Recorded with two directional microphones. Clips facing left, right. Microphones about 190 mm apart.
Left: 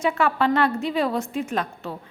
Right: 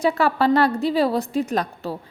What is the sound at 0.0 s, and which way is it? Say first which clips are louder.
A woman's voice: right 3 dB; 35° right (ahead or behind).